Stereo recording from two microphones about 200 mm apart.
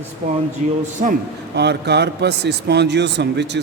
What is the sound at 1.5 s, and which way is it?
Speech, 55° right (ahead or behind).